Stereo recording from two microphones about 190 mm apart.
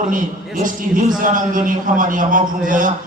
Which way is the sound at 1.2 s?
45° right (ahead or behind).